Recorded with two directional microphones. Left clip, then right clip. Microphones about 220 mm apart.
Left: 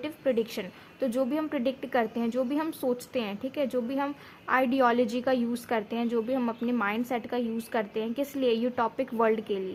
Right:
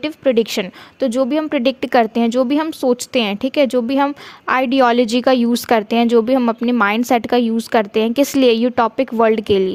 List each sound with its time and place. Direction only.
0.0 s a woman's voice: 40° right (ahead or behind)